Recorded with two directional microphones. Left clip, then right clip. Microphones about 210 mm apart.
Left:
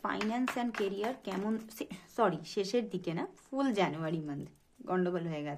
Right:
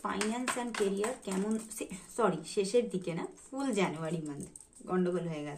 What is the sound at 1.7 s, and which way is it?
Speech, 45° left (ahead or behind).